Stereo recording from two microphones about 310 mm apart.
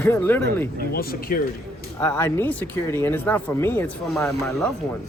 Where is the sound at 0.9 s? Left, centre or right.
Left.